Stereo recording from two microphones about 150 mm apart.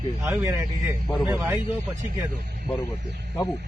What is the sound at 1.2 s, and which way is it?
Speech, 10° right (ahead or behind).